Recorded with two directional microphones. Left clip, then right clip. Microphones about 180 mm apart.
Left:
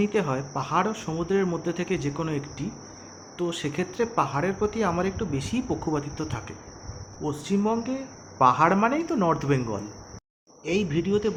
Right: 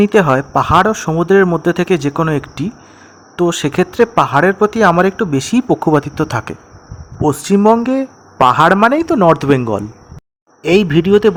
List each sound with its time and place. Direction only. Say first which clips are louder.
0.0 s speech: right 15 dB; 60° right (ahead or behind)